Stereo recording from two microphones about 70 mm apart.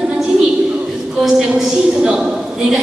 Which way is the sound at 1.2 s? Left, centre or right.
Centre.